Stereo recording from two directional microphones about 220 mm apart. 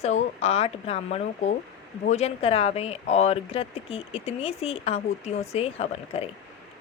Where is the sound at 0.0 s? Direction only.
30° left (ahead or behind).